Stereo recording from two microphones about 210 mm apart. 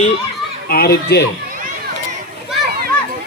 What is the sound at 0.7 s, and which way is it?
Speech, 45° left (ahead or behind).